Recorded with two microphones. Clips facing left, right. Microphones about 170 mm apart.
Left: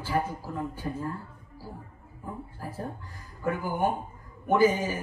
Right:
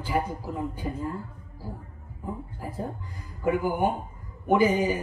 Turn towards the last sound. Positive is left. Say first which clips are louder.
# right 1 dB
turn(degrees=-15)  # may be behind; listen again after turning